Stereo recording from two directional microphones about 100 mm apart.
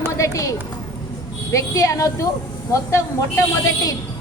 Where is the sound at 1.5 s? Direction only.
35° left (ahead or behind).